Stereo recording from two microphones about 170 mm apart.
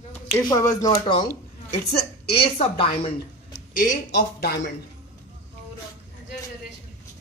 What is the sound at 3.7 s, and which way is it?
Speech, 65° left (ahead or behind).